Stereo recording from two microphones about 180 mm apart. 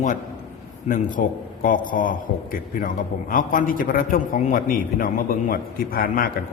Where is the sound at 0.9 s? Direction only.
45° left (ahead or behind).